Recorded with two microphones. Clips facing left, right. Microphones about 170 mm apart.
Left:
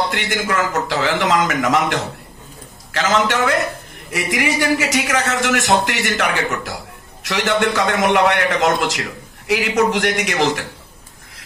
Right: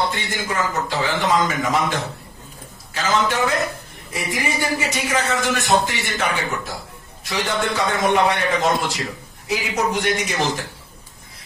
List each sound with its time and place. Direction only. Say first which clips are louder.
0.1 s a man's voice: left 5 dB; 80° left